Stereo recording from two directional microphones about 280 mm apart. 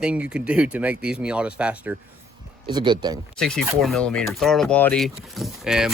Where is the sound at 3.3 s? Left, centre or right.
Centre.